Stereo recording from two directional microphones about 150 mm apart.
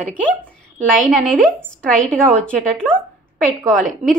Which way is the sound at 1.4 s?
5° left (ahead or behind).